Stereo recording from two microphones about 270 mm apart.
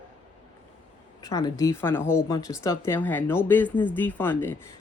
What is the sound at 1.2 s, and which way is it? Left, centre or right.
Speech, centre.